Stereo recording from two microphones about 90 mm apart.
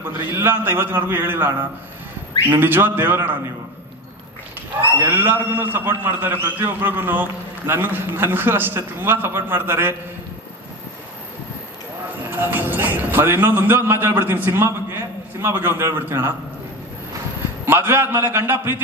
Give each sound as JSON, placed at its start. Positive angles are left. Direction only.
{"t": 0.3, "sound": "a man's voice", "side_deg": -25}
{"t": 2.5, "sound": "a man's voice", "side_deg": -25}
{"t": 4.9, "sound": "a man's voice", "side_deg": -20}
{"t": 12.3, "sound": "a man's voice", "side_deg": -20}
{"t": 17.6, "sound": "a man's voice", "side_deg": -25}